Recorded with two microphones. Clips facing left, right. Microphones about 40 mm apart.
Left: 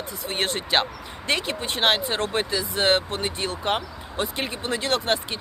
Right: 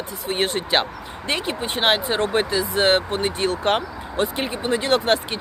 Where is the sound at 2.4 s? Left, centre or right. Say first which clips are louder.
Right 3 dB; right.